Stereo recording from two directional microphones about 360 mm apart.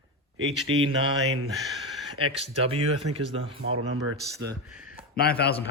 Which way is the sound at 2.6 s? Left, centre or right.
Centre.